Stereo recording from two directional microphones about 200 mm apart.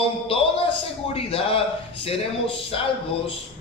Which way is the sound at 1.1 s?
30° left (ahead or behind).